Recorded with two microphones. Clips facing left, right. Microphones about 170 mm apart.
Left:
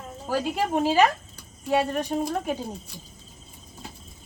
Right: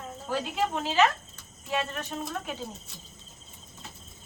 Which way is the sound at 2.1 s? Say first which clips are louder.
Left 8 dB; 50° left (ahead or behind).